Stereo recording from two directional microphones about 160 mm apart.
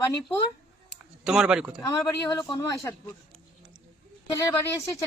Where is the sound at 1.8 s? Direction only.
25° left (ahead or behind).